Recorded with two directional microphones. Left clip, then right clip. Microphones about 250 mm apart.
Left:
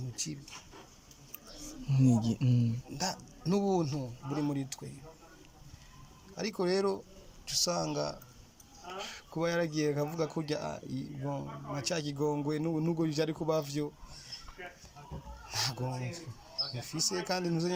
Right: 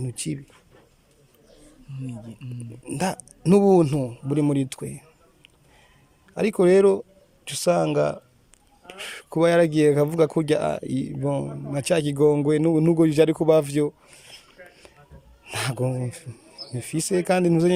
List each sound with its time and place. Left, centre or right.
1.9 s speech: centre
2.9 s speech: right
6.3 s speech: right
15.4 s speech: right